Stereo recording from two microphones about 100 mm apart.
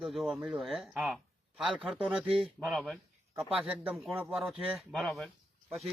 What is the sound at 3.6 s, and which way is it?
Speech, 5° right (ahead or behind).